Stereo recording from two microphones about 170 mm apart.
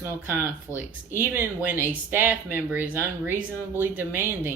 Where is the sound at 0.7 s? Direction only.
15° left (ahead or behind).